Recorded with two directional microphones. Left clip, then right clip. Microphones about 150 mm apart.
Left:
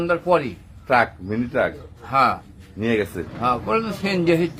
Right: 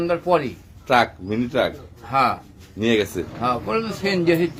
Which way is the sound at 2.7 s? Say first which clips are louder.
Right 2 dB; 20° right (ahead or behind).